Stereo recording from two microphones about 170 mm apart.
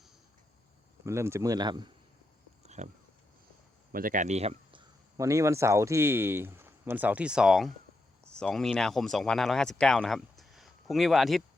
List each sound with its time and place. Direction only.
1.0 s speech: 15° right (ahead or behind)
2.6 s a sound: 45° right (ahead or behind)
3.9 s speech: 55° right (ahead or behind); by 11.4 s centre (ahead or behind)